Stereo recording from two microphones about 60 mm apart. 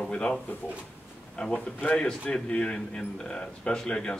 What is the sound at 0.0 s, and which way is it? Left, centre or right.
Drawer open or close, centre.